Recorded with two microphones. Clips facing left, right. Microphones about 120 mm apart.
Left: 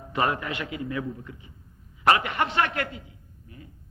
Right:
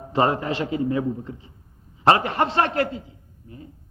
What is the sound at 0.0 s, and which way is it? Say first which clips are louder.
A man's voice: right 5 dB; 30° right (ahead or behind).